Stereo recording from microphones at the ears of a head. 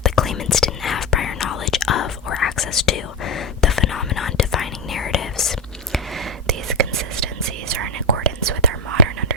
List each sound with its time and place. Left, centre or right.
0.0 s whispering: left
6.2 s whispering: right